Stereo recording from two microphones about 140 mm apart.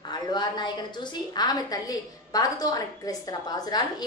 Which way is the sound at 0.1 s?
30° left (ahead or behind).